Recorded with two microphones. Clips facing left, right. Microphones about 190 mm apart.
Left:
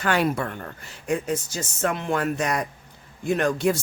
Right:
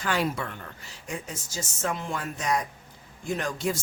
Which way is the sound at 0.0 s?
60° left (ahead or behind).